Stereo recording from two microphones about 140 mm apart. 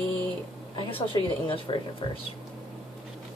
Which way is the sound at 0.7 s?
35° left (ahead or behind).